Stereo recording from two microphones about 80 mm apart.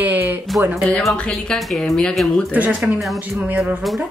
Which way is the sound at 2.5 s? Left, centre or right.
Right.